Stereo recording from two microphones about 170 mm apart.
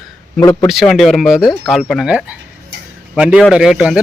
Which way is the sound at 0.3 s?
15° left (ahead or behind).